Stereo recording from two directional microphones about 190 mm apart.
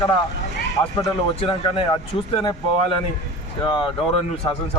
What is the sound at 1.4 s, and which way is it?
Speech, 25° left (ahead or behind).